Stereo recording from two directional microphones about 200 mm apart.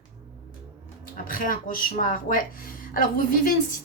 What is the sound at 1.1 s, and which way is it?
A woman's voice, 40° left (ahead or behind).